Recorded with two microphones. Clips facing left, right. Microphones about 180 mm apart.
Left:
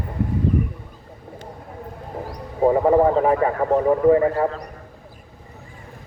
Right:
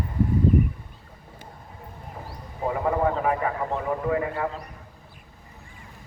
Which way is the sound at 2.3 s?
35° left (ahead or behind).